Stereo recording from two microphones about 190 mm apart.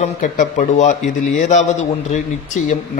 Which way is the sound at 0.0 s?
40° left (ahead or behind).